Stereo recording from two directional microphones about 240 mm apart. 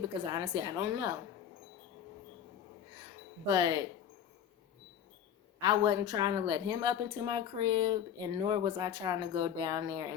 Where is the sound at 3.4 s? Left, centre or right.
Centre.